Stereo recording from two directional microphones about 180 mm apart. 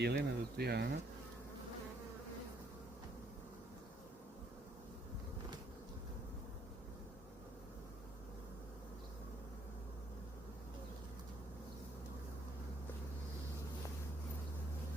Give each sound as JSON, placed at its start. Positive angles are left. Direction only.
{"t": 0.0, "sound": "speech", "side_deg": -65}